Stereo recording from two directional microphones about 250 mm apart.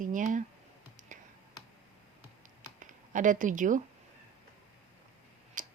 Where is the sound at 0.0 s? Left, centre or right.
Right.